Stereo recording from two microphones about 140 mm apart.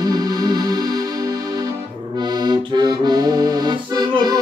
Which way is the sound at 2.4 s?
30° right (ahead or behind).